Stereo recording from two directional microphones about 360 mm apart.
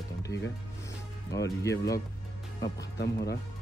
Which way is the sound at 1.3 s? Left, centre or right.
Centre.